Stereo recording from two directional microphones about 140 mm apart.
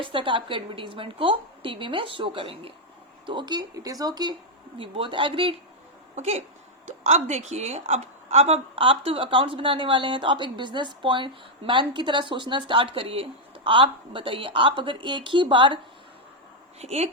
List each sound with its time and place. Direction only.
0.0 s a woman's voice: 35° right (ahead or behind)
6.1 s a woman's voice: 50° right (ahead or behind); by 15.8 s 35° right (ahead or behind)
16.8 s speech: 50° right (ahead or behind)